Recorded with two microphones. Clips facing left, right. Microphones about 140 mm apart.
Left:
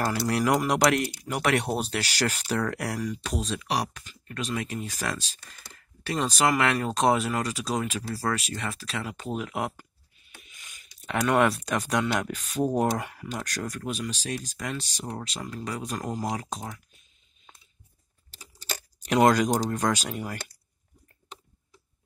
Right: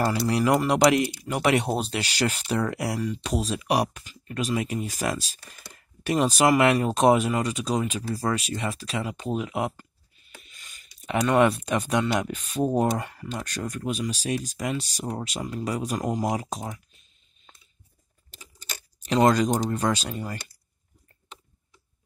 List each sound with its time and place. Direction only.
0.0 s speech: centre (ahead or behind)
3.6 s speech: 15° right (ahead or behind); by 7.9 s centre (ahead or behind)
8.1 s speech: 15° right (ahead or behind)
8.4 s speech: centre (ahead or behind)
10.5 s a sound: 15° left (ahead or behind)
11.0 s speech: centre (ahead or behind)
13.0 s speech: 10° left (ahead or behind)
13.4 s speech: 5° right (ahead or behind)
19.3 s speech: 5° left (ahead or behind)